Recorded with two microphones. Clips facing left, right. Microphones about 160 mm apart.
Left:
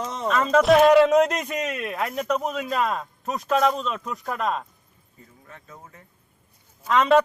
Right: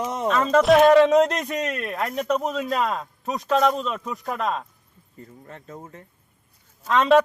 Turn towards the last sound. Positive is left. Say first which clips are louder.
# right 1 dB
turn(degrees=0)  # may be behind; listen again after turning